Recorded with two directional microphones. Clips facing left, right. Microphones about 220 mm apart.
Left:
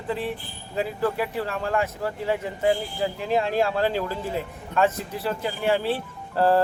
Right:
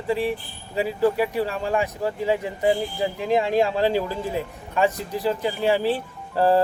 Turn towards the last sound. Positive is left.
turn(degrees=-15)  # may be behind; listen again after turning